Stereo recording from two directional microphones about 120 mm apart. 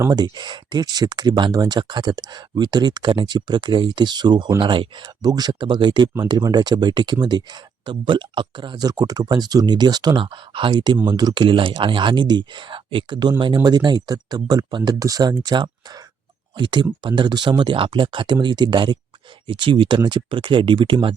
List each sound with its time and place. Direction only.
0.1 s speech: 35° right (ahead or behind)